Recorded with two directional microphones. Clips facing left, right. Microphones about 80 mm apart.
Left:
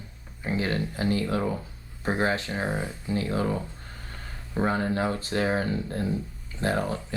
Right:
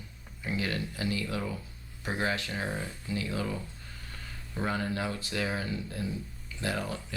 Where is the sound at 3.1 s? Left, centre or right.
Left.